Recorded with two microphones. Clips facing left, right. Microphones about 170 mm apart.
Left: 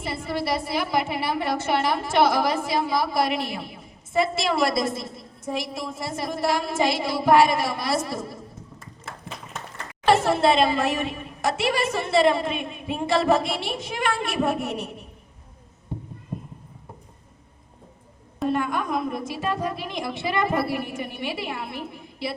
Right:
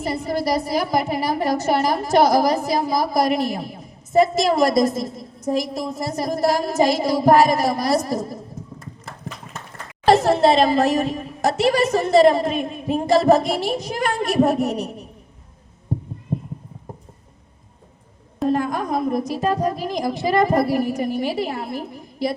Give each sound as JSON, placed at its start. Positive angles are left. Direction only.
{"t": 0.0, "sound": "a woman's voice", "side_deg": -40}
{"t": 10.1, "sound": "a woman's voice", "side_deg": -40}
{"t": 15.9, "sound": "heart sounds", "side_deg": -40}
{"t": 18.4, "sound": "a woman's voice", "side_deg": -40}